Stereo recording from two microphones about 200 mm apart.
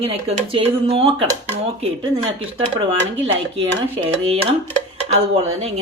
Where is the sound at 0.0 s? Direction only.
30° right (ahead or behind).